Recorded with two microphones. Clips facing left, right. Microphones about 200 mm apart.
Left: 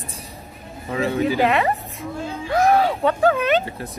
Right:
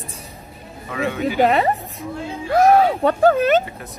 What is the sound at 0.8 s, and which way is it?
Speech, 30° left (ahead or behind).